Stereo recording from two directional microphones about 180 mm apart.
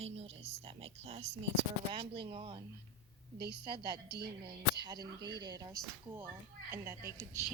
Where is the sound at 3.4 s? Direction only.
65° right (ahead or behind).